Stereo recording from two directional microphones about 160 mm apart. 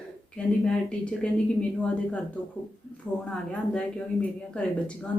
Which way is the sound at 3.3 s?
10° left (ahead or behind).